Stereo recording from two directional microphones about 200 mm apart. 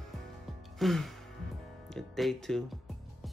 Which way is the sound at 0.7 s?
Centre (ahead or behind).